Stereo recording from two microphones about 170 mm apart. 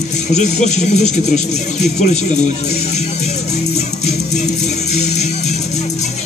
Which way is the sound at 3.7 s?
40° left (ahead or behind).